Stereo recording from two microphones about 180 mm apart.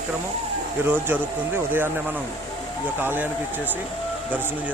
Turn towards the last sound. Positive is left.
turn(degrees=-10)  # may be behind; listen again after turning